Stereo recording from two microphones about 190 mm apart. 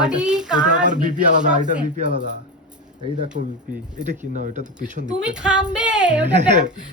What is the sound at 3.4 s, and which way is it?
Speech, 40° right (ahead or behind).